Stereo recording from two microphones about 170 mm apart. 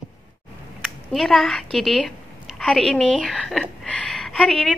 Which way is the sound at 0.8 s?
Centre (ahead or behind).